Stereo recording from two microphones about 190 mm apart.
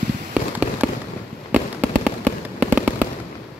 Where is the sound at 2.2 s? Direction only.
5° right (ahead or behind).